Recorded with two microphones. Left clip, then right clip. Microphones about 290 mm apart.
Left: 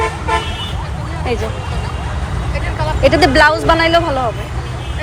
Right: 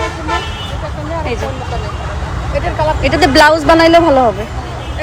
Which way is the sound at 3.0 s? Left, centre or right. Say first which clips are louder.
Even; centre.